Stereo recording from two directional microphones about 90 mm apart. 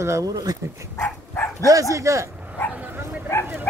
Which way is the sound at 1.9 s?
35° right (ahead or behind).